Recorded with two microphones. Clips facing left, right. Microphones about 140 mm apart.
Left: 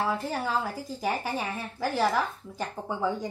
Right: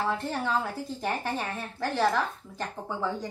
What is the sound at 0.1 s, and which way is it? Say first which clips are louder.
Speech: even; 5° left (ahead or behind).